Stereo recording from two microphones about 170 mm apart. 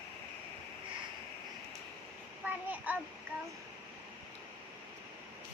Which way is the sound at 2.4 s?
10° right (ahead or behind).